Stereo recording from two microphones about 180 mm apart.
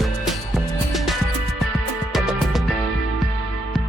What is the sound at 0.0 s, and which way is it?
Music, centre (ahead or behind).